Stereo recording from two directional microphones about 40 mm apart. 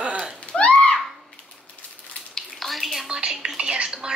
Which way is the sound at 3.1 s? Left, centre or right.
Right.